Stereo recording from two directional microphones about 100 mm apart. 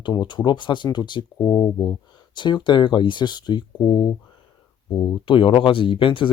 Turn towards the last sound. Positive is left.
turn(degrees=60)  # may be behind; listen again after turning